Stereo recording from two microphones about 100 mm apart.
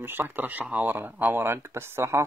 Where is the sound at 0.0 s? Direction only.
20° right (ahead or behind).